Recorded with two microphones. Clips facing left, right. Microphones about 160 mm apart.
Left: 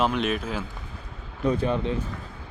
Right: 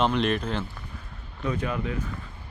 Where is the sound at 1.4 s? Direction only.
35° left (ahead or behind).